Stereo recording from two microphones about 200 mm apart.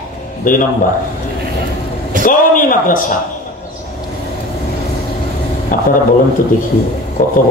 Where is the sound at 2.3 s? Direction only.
45° left (ahead or behind).